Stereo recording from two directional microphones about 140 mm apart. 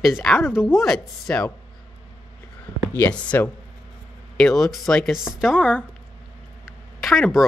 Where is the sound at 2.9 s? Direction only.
10° left (ahead or behind).